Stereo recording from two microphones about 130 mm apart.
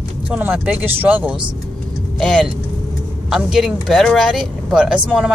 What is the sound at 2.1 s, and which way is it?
Speech, 5° left (ahead or behind).